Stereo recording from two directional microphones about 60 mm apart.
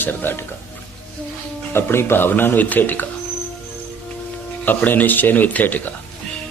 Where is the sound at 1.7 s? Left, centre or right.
Left.